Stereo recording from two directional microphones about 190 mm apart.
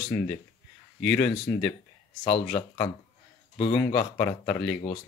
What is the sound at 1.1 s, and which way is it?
Speech, 5° left (ahead or behind).